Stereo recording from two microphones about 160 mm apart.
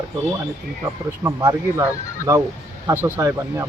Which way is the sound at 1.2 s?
15° right (ahead or behind).